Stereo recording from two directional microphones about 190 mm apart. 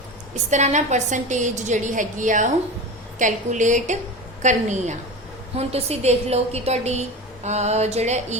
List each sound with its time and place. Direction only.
0.5 s a woman's voice: 40° right (ahead or behind)